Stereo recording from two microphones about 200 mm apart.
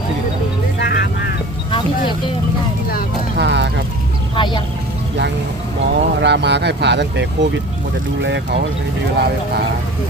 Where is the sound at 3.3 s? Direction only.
60° right (ahead or behind).